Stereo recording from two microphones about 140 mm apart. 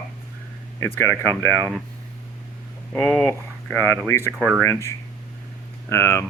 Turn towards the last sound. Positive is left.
turn(degrees=20)  # may be behind; listen again after turning